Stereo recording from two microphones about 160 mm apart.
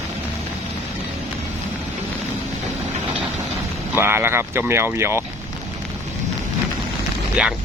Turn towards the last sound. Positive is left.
turn(degrees=-5)  # may be behind; listen again after turning